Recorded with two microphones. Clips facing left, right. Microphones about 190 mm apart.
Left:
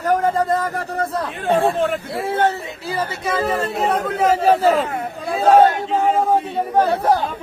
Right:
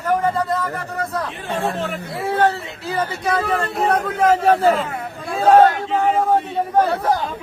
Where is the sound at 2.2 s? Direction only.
25° left (ahead or behind).